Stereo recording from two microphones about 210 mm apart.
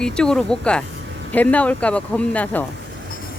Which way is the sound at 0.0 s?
5° left (ahead or behind).